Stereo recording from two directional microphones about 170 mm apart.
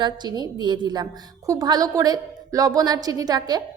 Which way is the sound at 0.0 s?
25° right (ahead or behind).